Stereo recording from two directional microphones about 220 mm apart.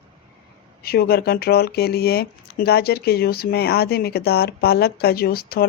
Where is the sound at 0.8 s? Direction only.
45° left (ahead or behind).